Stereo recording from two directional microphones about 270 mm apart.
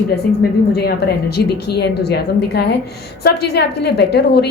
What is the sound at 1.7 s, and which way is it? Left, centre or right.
A woman's voice, left.